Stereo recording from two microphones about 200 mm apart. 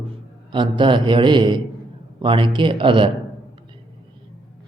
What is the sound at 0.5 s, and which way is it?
Mantra, 25° right (ahead or behind).